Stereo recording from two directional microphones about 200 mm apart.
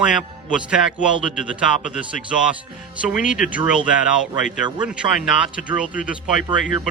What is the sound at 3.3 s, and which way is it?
Speech, 5° right (ahead or behind).